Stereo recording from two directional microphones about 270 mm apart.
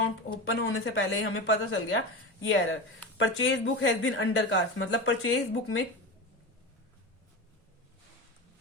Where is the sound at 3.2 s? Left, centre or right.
Left.